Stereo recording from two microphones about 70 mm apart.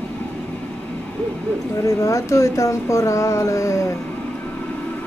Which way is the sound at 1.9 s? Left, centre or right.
Left.